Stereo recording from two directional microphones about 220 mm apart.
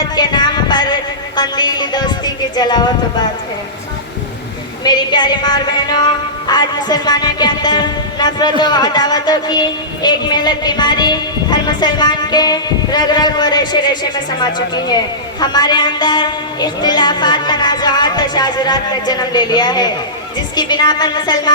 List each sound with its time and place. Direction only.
0.2 s a sound: 20° left (ahead or behind)
1.4 s music: 20° left (ahead or behind)
4.8 s speech: 20° left (ahead or behind)